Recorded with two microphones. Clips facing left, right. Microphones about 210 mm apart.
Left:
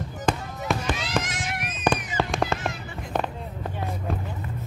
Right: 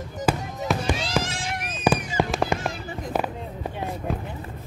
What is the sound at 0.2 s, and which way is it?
Fireworks, 5° right (ahead or behind).